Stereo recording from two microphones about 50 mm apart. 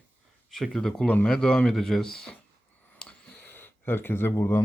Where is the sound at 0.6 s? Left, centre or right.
Centre.